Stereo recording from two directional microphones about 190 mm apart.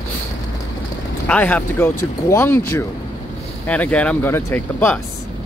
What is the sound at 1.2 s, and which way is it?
Speech, 5° left (ahead or behind).